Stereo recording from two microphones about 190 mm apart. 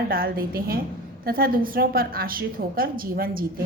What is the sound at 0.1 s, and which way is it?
A woman's voice, 50° right (ahead or behind).